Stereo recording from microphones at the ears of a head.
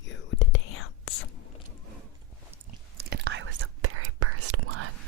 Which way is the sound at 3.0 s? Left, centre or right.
Right.